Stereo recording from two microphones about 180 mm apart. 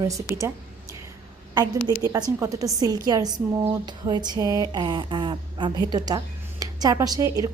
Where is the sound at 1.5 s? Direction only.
20° right (ahead or behind).